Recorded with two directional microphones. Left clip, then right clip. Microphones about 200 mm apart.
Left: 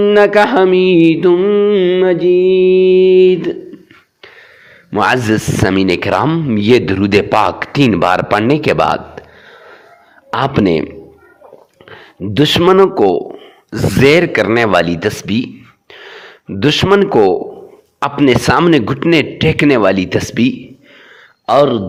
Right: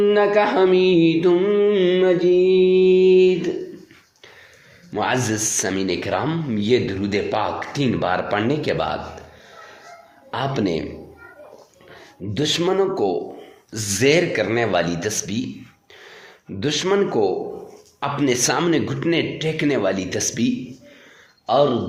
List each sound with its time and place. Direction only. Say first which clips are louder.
0.0 s speech: left 8 dB; 40° left (ahead or behind)
4.9 s speech: left 9 dB; 40° left (ahead or behind)
10.3 s speech: left 10 dB; 40° left (ahead or behind)
11.9 s speech: left 9 dB; 45° left (ahead or behind)
15.9 s a sound: left 11 dB; 45° left (ahead or behind)
18.0 s speech: left 9 dB; 40° left (ahead or behind)